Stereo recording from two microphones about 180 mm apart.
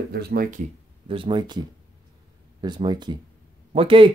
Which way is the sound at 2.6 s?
25° right (ahead or behind).